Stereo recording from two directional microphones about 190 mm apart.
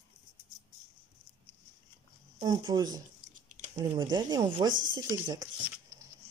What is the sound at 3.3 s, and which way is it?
Chewing, 45° right (ahead or behind).